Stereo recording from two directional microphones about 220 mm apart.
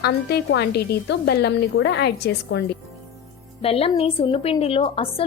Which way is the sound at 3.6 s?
25° left (ahead or behind).